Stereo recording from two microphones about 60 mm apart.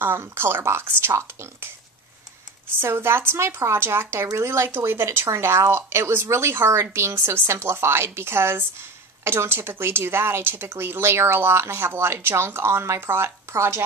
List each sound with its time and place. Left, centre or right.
0.0 s speech: right
2.8 s a woman's voice: right